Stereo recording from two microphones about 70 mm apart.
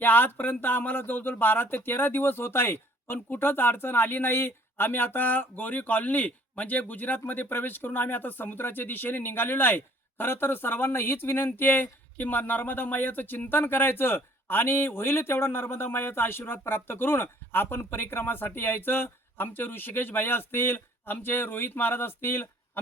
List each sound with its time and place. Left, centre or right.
0.0 s speech: left